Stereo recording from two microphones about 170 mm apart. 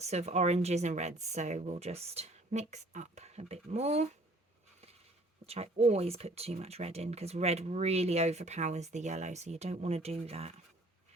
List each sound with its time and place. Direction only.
0.0 s speech: 40° right (ahead or behind)
5.5 s speech: 40° right (ahead or behind)